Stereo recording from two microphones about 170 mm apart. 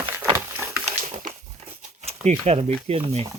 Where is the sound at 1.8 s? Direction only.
45° right (ahead or behind).